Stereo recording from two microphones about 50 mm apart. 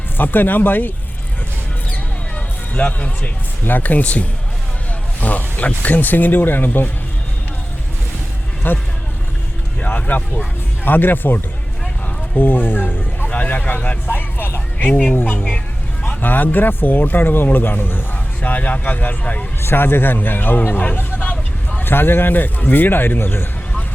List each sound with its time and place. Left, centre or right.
0.2 s speech: left
2.7 s speech: left
3.6 s speech: left
8.7 s speech: left
9.8 s speech: left
12.4 s speech: left
13.2 s speech: left
14.1 s vehicle: left
16.0 s speech: left
19.2 s speech: left
19.6 s speech: left